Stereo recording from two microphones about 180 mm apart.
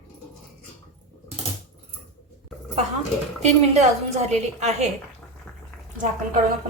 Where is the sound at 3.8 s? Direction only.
40° right (ahead or behind).